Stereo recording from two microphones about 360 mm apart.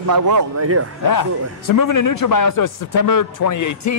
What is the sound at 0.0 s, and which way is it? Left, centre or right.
Speech, right.